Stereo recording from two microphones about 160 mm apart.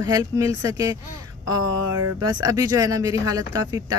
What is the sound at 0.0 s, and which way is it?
Speech, 20° right (ahead or behind).